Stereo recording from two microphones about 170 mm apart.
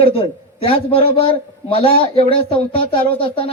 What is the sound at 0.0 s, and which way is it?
Speech, 30° left (ahead or behind).